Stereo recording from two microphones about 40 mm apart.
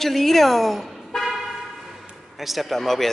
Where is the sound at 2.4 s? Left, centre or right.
Centre.